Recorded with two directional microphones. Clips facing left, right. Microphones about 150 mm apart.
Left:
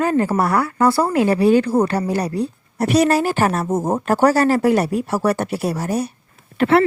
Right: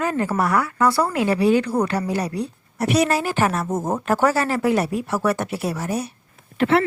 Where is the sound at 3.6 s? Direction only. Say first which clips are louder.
Left 4 dB; 25° left (ahead or behind).